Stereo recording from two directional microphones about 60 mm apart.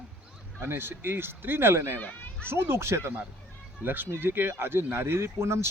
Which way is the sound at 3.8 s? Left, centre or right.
Right.